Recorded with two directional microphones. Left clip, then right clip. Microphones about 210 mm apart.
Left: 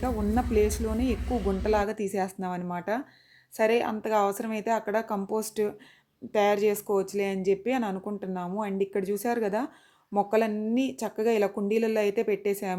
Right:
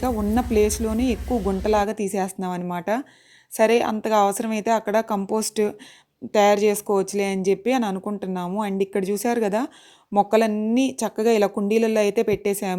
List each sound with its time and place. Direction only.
0.0 s a woman's voice: 30° right (ahead or behind)